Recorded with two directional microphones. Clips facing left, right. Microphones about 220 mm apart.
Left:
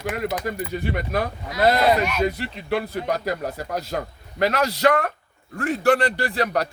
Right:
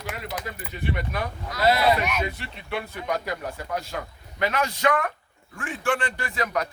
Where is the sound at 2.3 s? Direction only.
35° left (ahead or behind).